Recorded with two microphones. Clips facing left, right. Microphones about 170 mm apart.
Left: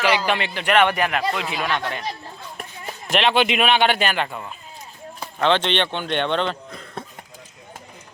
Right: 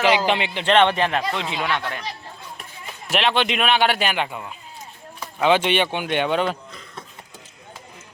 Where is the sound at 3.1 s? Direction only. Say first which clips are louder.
Left 2 dB; centre (ahead or behind).